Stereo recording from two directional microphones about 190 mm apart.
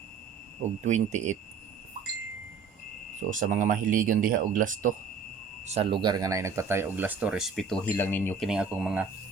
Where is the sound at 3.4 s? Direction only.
45° right (ahead or behind).